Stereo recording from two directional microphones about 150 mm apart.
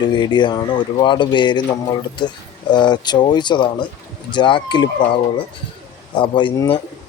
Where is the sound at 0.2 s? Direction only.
30° left (ahead or behind).